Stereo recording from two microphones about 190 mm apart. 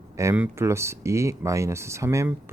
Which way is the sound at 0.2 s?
10° right (ahead or behind).